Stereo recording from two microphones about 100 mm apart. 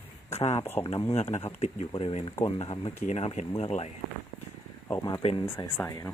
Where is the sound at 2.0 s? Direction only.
75° left (ahead or behind).